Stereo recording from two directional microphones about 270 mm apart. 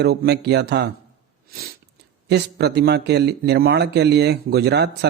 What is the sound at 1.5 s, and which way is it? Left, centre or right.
Sneeze, right.